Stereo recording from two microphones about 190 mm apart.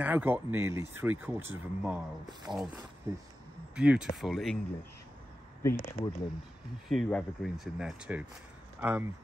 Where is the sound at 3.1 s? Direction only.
15° right (ahead or behind).